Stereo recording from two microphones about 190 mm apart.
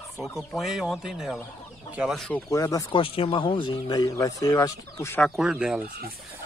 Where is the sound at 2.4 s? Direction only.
15° left (ahead or behind).